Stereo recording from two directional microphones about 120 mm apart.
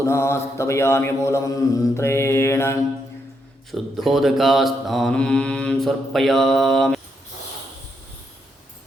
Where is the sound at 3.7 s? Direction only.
Centre (ahead or behind).